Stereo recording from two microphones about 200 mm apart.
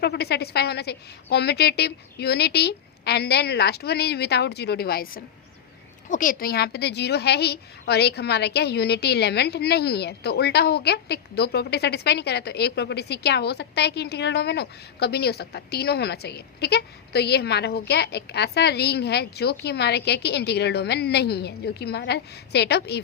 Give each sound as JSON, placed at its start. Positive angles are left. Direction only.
{"t": 0.0, "sound": "a woman's voice", "side_deg": 55}